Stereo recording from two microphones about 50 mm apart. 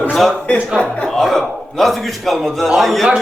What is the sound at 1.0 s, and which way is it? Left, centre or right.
A man's voice, centre.